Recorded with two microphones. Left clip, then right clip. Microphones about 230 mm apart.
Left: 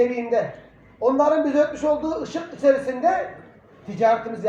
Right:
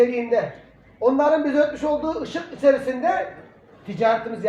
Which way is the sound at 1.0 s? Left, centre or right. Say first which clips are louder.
Even; right.